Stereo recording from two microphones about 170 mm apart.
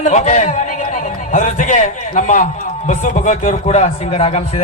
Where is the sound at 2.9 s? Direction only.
45° left (ahead or behind).